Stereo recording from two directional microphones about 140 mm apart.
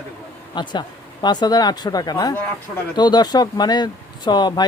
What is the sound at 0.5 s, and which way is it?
Speech, 30° left (ahead or behind).